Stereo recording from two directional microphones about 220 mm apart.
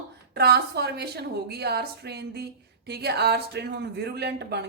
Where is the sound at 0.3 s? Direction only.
45° right (ahead or behind).